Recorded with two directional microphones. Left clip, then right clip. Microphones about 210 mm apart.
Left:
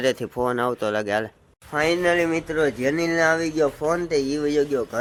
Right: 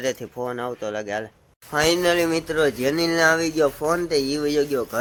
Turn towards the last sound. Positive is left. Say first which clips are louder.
# even
turn(degrees=-5)  # may be behind; listen again after turning